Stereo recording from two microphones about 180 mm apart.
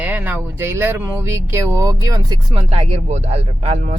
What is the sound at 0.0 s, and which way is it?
Speech, 10° right (ahead or behind).